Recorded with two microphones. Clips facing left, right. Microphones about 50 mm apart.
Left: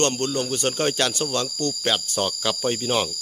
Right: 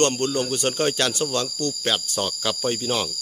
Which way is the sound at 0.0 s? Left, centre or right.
Centre.